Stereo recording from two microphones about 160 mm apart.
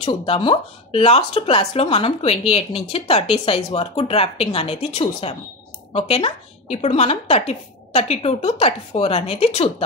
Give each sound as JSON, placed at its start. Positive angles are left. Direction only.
{"t": 0.0, "sound": "a woman's voice", "side_deg": 35}